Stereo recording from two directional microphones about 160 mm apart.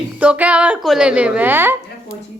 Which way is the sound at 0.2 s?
10° right (ahead or behind).